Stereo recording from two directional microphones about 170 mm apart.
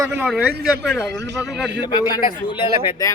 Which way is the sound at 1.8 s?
25° left (ahead or behind).